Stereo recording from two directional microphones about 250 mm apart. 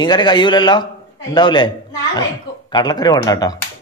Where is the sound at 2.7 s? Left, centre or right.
Centre.